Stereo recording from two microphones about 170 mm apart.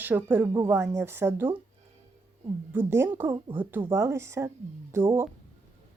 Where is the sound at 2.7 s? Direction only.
15° right (ahead or behind).